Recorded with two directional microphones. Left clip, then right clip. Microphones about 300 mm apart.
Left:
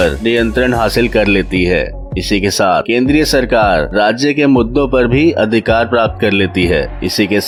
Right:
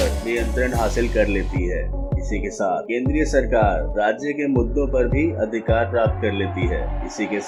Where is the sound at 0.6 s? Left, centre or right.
Left.